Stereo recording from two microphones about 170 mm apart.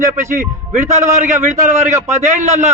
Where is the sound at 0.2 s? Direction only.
45° right (ahead or behind).